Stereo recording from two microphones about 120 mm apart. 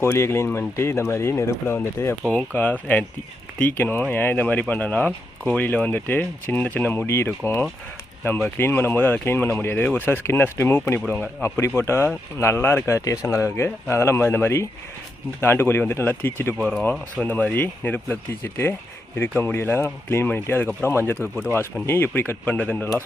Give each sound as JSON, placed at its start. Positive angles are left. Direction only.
{"t": 0.0, "sound": "speech", "side_deg": 20}